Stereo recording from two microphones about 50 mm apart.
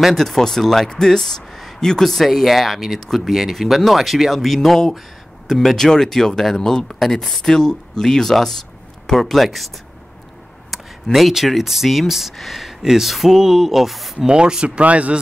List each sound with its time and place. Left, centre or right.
0.1 s speech: centre
10.7 s speech: centre
14.1 s speech: centre